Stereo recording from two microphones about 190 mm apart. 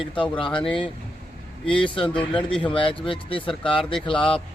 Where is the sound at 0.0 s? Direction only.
25° left (ahead or behind).